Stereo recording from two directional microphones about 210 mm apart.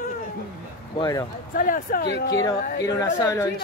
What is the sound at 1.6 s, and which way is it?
Speech, 45° left (ahead or behind).